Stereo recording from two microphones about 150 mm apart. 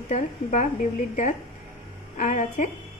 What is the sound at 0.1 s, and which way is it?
Speech, 55° left (ahead or behind).